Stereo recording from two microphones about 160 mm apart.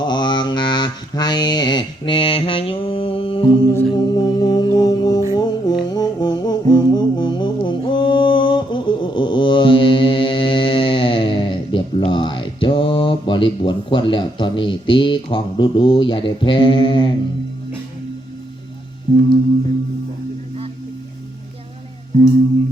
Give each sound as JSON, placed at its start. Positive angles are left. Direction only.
{"t": 0.0, "sound": "mantra", "side_deg": 30}
{"t": 4.1, "sound": "music", "side_deg": 25}
{"t": 19.1, "sound": "music", "side_deg": -40}